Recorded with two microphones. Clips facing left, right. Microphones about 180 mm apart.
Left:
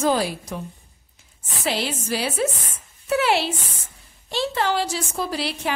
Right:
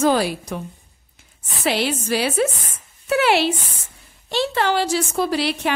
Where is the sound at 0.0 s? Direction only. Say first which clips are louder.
Right 3 dB; 70° right (ahead or behind).